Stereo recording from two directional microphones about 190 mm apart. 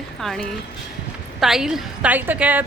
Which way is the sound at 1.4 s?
5° right (ahead or behind).